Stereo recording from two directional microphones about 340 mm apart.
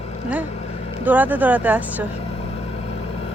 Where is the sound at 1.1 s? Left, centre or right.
Centre.